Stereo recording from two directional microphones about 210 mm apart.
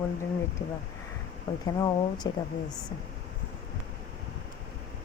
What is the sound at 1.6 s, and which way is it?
Speech, 20° left (ahead or behind).